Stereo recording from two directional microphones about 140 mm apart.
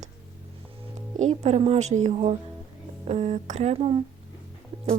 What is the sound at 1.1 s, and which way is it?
A woman's voice, 55° right (ahead or behind).